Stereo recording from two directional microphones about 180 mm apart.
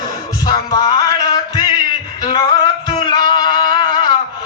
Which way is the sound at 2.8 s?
25° left (ahead or behind).